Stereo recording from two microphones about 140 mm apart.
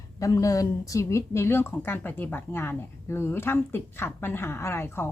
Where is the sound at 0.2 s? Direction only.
25° left (ahead or behind).